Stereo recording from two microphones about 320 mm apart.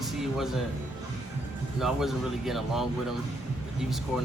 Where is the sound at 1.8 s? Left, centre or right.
Centre.